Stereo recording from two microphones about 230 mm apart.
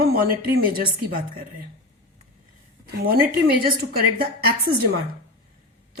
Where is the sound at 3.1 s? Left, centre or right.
Right.